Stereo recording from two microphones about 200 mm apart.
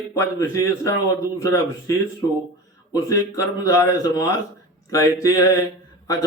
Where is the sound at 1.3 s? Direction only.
15° left (ahead or behind).